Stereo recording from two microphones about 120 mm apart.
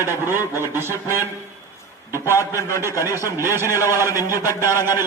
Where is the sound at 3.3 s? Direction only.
20° right (ahead or behind).